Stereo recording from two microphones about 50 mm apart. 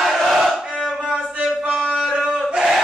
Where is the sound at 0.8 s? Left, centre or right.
Centre.